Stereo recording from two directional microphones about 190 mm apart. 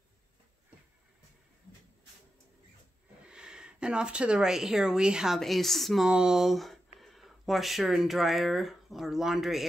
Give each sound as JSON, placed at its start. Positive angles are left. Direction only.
{"t": 3.3, "sound": "speech", "side_deg": -5}